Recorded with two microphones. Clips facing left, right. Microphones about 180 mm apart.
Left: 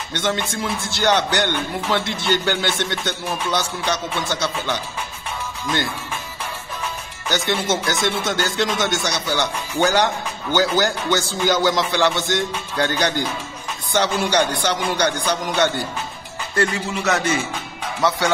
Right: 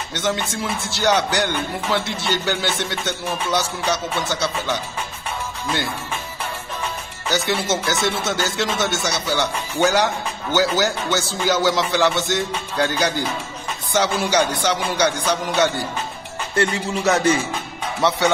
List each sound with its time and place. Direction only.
0.1 s speech: 10° right (ahead or behind)
7.2 s speech: 10° right (ahead or behind)
16.5 s music: 25° right (ahead or behind)